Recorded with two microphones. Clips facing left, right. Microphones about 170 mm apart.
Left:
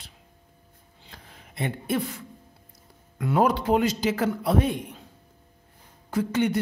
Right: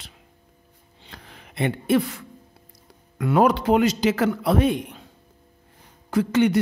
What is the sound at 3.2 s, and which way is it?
Speech, 75° right (ahead or behind).